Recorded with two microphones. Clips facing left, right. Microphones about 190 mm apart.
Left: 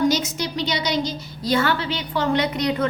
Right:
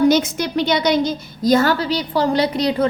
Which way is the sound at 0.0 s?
55° right (ahead or behind).